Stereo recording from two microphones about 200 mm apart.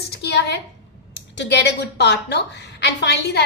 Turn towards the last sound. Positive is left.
turn(degrees=55)  # may be behind; listen again after turning